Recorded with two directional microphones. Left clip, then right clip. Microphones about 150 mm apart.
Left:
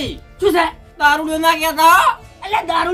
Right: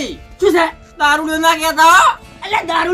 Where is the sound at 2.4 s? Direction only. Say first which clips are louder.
Right 1 dB; 10° right (ahead or behind).